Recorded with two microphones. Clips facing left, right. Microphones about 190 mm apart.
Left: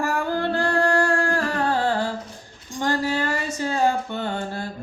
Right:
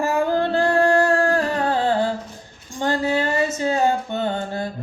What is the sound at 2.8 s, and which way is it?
Music, 20° right (ahead or behind).